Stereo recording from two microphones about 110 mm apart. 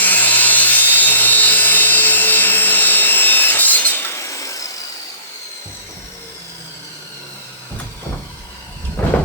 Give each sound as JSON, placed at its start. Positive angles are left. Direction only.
{"t": 0.0, "sound": "sawing", "side_deg": 15}
{"t": 9.0, "sound": "vehicle", "side_deg": 20}